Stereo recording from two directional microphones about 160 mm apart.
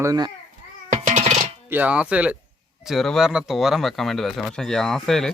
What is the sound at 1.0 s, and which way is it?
Music, 45° right (ahead or behind).